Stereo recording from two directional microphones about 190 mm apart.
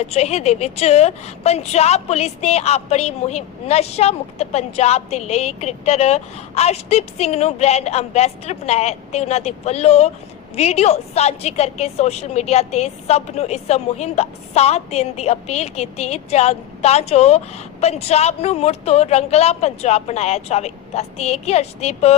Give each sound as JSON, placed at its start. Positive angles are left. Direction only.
{"t": 0.0, "sound": "a woman's voice", "side_deg": 35}